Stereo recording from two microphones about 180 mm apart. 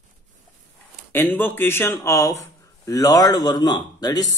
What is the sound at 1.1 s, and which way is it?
Speech, 10° left (ahead or behind).